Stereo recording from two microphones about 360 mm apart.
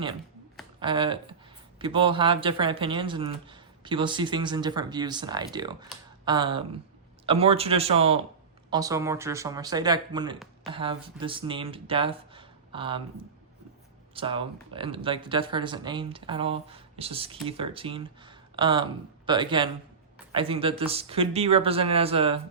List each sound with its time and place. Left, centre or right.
0.8 s speech: centre
14.1 s speech: centre